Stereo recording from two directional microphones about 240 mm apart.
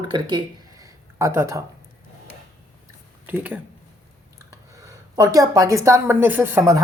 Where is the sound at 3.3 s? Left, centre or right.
Centre.